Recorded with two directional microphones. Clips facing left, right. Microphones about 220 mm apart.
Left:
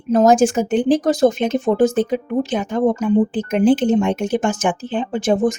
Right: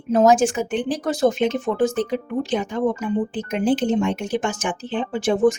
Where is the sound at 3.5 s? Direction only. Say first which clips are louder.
Left 4 dB; 45° left (ahead or behind).